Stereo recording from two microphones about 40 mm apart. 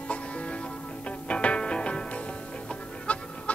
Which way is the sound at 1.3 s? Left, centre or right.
Left.